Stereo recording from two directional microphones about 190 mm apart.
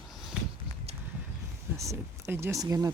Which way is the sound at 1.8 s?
15° right (ahead or behind).